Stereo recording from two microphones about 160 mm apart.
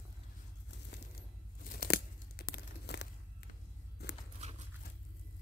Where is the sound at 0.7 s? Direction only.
80° left.